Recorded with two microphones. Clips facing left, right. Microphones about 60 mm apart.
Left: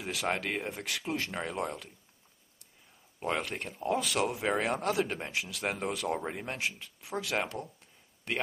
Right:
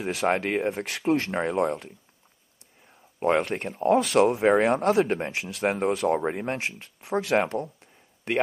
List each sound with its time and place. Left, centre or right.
0.0 s speech: right
3.2 s speech: right